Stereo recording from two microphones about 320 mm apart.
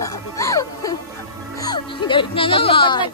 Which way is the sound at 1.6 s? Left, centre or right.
Centre.